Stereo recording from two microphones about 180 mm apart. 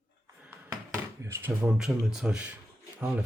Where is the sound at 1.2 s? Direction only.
15° right (ahead or behind).